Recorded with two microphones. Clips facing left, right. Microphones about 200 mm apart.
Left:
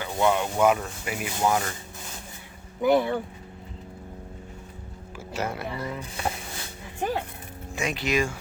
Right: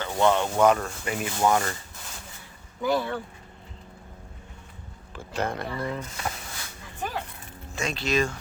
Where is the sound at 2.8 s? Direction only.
20° left (ahead or behind).